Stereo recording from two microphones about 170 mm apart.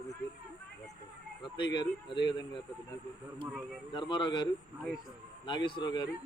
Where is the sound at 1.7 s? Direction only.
25° left (ahead or behind).